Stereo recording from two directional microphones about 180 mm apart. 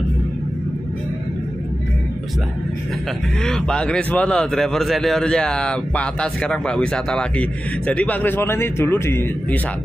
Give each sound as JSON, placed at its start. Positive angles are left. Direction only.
{"t": 3.4, "sound": "a man's voice", "side_deg": 5}